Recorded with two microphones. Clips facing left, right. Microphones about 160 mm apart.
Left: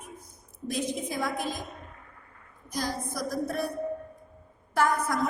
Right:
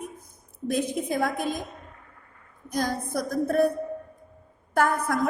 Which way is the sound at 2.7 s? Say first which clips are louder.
Right 5 dB; 55° right (ahead or behind).